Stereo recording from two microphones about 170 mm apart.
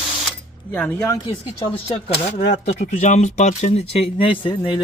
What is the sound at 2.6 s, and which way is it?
Speech, 45° left (ahead or behind).